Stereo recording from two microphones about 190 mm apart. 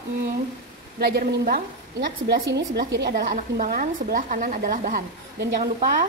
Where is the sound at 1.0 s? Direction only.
55° right (ahead or behind).